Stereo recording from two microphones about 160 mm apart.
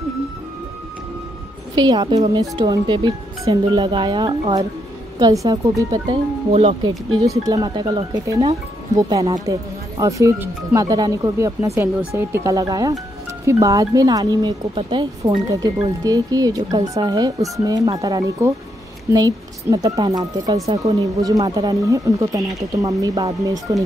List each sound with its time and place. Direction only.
1.8 s speech: 25° right (ahead or behind)
6.5 s speech: 40° right (ahead or behind)
6.8 s speech: 20° right (ahead or behind)